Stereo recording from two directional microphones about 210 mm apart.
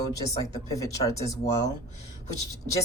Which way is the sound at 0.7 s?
15° left (ahead or behind).